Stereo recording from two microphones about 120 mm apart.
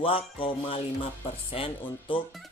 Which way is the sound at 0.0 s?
50° left (ahead or behind).